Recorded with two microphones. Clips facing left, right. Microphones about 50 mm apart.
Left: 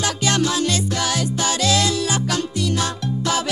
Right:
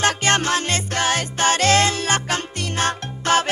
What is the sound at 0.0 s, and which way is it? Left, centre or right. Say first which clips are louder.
Music: right 2 dB; right.